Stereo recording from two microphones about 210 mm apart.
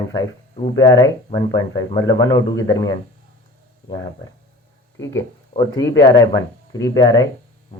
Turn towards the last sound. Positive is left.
turn(degrees=15)  # may be behind; listen again after turning